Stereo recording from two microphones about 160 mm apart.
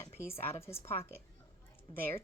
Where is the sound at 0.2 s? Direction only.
15° left (ahead or behind).